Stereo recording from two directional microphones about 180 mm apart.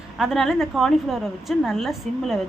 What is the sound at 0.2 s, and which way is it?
A woman's voice, centre (ahead or behind).